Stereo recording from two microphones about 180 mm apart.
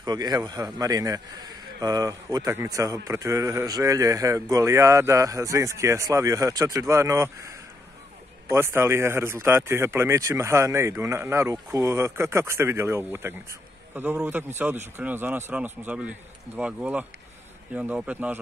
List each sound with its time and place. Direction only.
0.0 s a man's voice: 20° right (ahead or behind)
8.5 s a man's voice: 15° right (ahead or behind)